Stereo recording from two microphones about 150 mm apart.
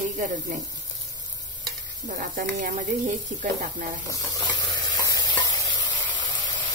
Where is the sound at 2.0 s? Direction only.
75° right (ahead or behind).